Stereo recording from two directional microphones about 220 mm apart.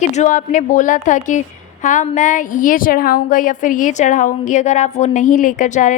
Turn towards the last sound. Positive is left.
turn(degrees=35)  # may be behind; listen again after turning